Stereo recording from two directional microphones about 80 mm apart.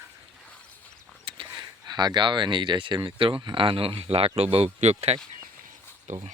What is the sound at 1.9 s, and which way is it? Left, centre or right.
Speech, right.